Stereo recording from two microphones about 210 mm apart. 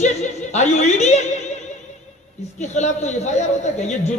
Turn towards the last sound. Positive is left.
turn(degrees=35)  # may be behind; listen again after turning